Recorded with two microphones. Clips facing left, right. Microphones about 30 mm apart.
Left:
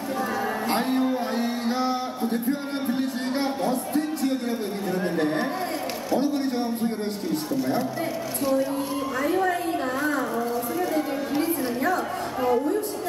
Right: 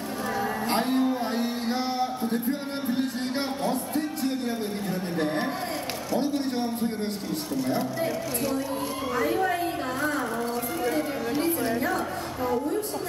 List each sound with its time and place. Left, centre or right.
0.4 s music: centre
1.7 s music: centre
5.1 s a sound: centre
6.1 s a man's voice: centre
9.2 s a man's voice: centre
11.0 s chatter: centre